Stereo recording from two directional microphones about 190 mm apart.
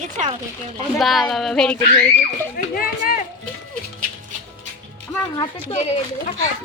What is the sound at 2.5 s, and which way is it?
Speech, 50° left (ahead or behind).